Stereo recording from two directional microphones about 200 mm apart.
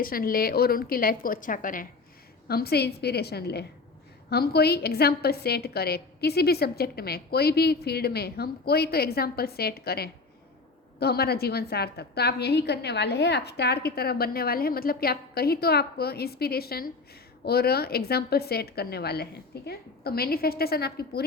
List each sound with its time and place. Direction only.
0.0 s a woman's voice: 45° left (ahead or behind)